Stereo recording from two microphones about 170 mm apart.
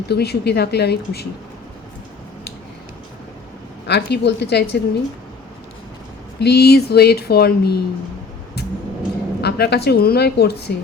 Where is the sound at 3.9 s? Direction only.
80° left.